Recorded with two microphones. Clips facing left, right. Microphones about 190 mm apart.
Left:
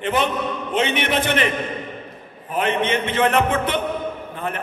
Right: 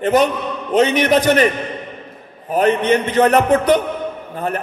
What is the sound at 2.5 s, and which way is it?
A man's voice, 40° right (ahead or behind).